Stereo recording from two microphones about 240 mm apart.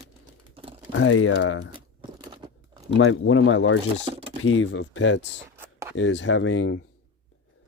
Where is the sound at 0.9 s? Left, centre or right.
Left.